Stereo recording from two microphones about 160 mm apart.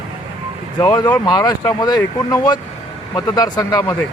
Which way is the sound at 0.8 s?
25° left (ahead or behind).